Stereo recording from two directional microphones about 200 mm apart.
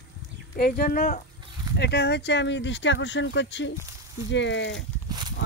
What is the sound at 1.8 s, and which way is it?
Speech, 55° left (ahead or behind).